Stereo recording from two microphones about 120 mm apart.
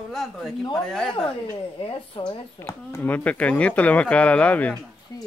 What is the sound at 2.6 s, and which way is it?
Speech, 20° left (ahead or behind).